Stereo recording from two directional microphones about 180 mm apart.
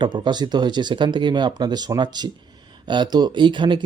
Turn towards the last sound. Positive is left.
turn(degrees=-25)  # may be behind; listen again after turning